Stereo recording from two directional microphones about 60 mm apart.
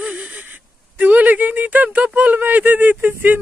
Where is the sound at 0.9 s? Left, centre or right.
Right.